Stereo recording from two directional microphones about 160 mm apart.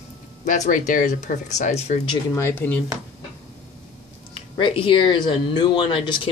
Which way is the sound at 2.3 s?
15° left (ahead or behind).